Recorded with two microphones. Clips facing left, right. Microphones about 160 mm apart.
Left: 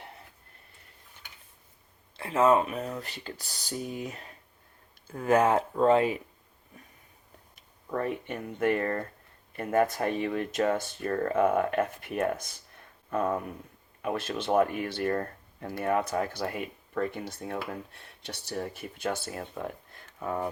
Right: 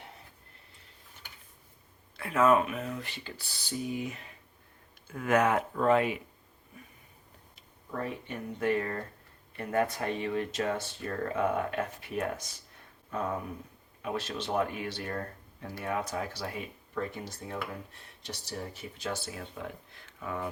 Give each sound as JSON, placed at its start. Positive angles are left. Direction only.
{"t": 2.1, "sound": "speech", "side_deg": 30}
{"t": 7.9, "sound": "speech", "side_deg": 55}
{"t": 20.1, "sound": "speech", "side_deg": 40}